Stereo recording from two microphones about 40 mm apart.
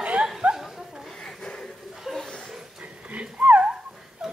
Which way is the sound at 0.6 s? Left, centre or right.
Centre.